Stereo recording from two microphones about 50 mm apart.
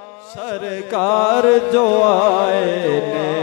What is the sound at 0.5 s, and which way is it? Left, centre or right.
Music, left.